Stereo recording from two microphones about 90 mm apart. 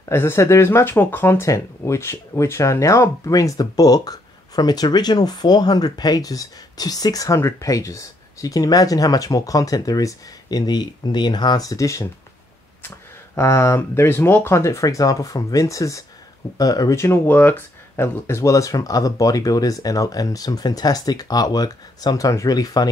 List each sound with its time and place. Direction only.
0.1 s speech: 30° left (ahead or behind)
7.3 s speech: 30° left (ahead or behind)
16.9 s speech: 25° left (ahead or behind); by 22.8 s 45° left (ahead or behind)